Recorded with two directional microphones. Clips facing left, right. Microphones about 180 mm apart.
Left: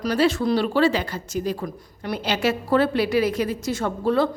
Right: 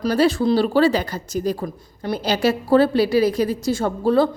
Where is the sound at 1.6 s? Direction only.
25° right (ahead or behind).